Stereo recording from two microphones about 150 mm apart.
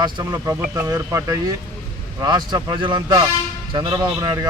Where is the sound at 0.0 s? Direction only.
25° right (ahead or behind).